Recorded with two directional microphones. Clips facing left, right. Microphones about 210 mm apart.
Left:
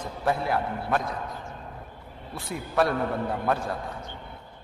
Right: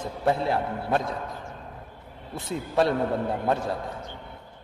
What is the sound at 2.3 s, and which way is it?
A man's voice, 20° right (ahead or behind).